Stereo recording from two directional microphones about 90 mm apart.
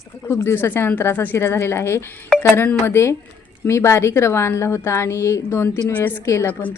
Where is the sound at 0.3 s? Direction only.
30° left (ahead or behind).